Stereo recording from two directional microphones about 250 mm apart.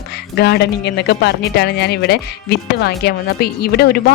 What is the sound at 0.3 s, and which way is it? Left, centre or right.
Speech, left.